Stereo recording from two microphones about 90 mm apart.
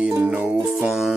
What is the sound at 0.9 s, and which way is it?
Music, 5° right (ahead or behind).